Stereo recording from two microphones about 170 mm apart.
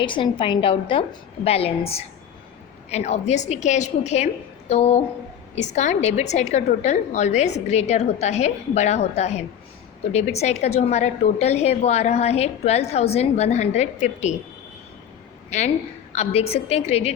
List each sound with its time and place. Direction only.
0.0 s a woman's voice: 30° left (ahead or behind)
15.4 s a woman's voice: 40° left (ahead or behind)